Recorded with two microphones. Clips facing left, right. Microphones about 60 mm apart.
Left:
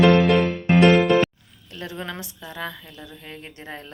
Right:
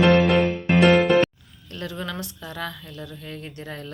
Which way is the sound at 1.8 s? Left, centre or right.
Left.